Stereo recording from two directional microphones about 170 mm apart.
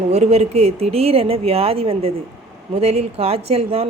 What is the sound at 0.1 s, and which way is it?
A woman's voice, 40° right (ahead or behind).